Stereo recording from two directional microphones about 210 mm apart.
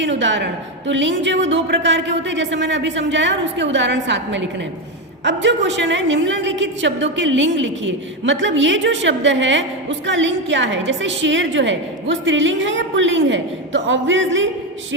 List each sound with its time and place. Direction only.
0.0 s a woman's voice: 60° right (ahead or behind)